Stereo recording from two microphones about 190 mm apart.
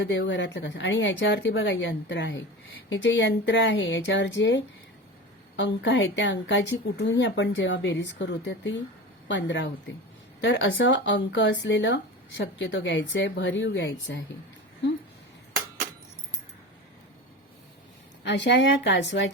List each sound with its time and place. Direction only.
0.0 s a woman's voice: 75° left (ahead or behind)
18.2 s a woman's voice: 70° left (ahead or behind)